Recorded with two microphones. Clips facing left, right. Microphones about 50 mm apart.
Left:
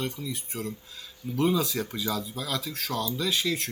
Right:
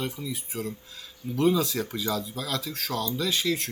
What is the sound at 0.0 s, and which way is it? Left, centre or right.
Speech, centre.